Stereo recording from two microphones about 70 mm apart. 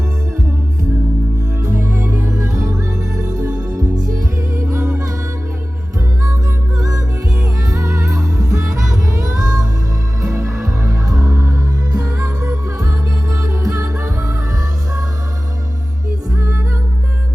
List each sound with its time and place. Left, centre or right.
1.6 s music: right
6.7 s music: right
11.3 s music: right
11.9 s music: right
12.1 s music: right
16.3 s music: right